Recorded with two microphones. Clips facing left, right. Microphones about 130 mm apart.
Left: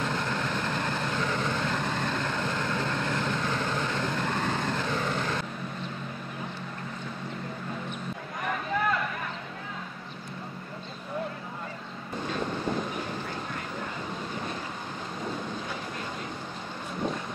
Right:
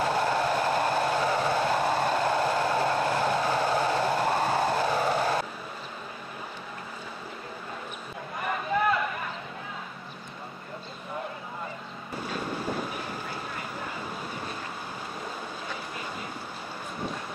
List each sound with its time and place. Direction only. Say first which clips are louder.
0.0 s train: right 5 dB; 10° right (ahead or behind)
2.1 s vehicle: right 6 dB; 10° right (ahead or behind)
8.4 s a sound: right 2 dB; 5° right (ahead or behind)